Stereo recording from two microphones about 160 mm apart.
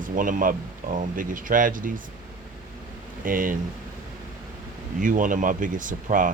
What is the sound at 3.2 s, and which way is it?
Speech, 60° right (ahead or behind).